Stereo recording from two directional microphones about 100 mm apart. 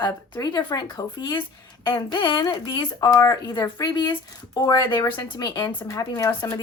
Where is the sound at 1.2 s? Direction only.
55° left (ahead or behind).